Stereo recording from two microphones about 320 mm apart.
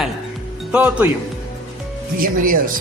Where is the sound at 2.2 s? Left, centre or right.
Right.